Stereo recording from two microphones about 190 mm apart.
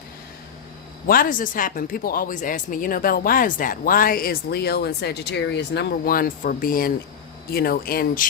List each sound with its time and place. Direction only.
1.0 s speech: 50° left (ahead or behind)